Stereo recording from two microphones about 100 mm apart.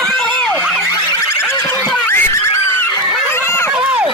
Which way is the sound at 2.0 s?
25° left (ahead or behind).